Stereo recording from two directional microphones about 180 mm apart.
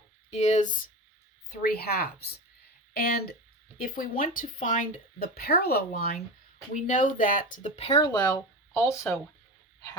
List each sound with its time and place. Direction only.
0.3 s speech: 40° left (ahead or behind)
1.5 s speech: 60° left (ahead or behind)
6.7 s speech: 45° left (ahead or behind); by 9.1 s 15° left (ahead or behind)